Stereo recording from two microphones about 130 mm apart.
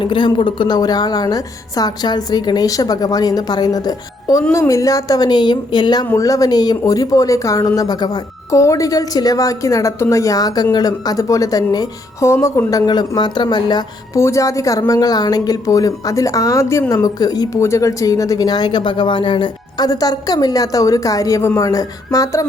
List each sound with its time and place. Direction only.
0.0 s a woman's voice: 35° left (ahead or behind)
14.2 s speech: 20° left (ahead or behind)